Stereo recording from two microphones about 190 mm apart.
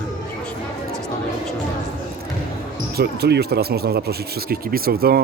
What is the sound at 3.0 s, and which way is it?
Speech, 60° right (ahead or behind).